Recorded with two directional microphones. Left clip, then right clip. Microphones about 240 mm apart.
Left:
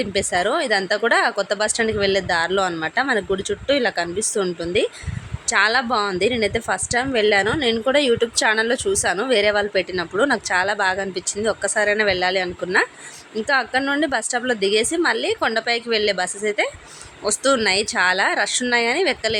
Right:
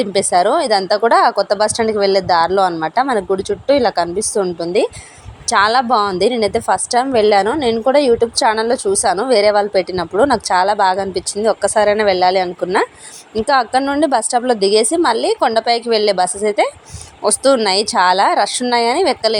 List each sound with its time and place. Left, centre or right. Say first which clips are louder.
0.0 s a woman's voice: right 7 dB; centre